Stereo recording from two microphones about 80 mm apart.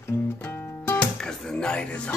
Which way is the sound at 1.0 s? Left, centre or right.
Centre.